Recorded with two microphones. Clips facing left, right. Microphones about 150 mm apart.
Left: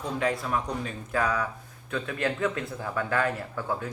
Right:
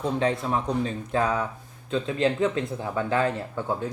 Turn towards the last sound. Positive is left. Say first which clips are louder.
# right 3 dB
turn(degrees=-20)  # may be behind; listen again after turning